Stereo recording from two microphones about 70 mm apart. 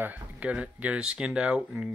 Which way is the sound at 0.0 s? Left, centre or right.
Right.